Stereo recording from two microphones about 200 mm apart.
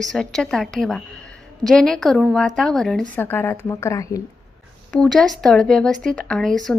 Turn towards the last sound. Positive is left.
turn(degrees=5)  # may be behind; listen again after turning